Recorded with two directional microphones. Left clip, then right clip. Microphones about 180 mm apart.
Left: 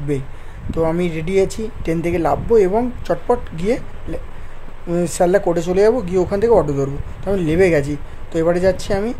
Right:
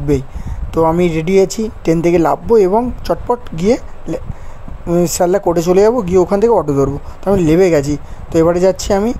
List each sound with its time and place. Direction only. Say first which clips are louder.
0.1 s speech: right 7 dB; 30° right (ahead or behind)